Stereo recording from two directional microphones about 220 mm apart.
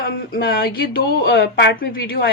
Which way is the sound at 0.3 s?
45° left (ahead or behind).